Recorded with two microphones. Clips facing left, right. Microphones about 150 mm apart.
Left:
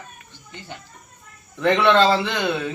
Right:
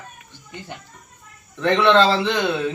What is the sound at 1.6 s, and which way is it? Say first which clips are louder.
Speech: right 1 dB; 5° left (ahead or behind).